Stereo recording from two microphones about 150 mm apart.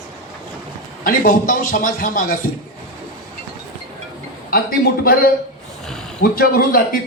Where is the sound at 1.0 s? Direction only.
65° left (ahead or behind).